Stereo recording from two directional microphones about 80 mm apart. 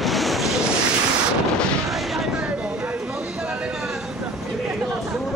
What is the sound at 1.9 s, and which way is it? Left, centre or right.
Artillery fire, centre.